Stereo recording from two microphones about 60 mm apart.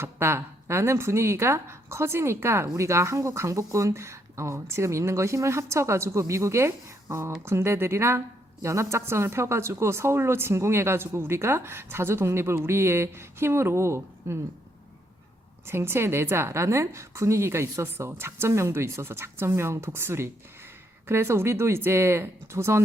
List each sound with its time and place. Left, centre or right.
0.0 s speech: right
15.6 s speech: right